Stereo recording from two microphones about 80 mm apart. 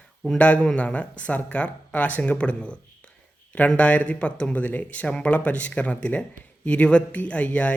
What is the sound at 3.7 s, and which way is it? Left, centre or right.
Speech, centre.